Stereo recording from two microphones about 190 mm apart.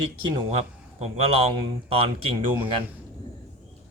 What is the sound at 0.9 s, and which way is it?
Speech, 30° right (ahead or behind).